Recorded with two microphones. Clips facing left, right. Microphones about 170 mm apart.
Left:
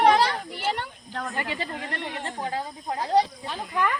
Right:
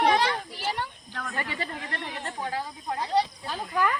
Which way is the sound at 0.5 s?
65° left (ahead or behind).